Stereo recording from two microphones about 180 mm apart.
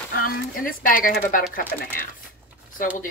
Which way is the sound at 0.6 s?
50° left (ahead or behind).